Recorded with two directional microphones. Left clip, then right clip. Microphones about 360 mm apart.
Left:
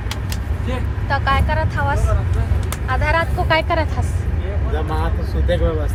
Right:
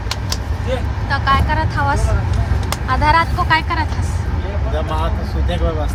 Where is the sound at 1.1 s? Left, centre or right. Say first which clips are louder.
Right 2 dB; centre.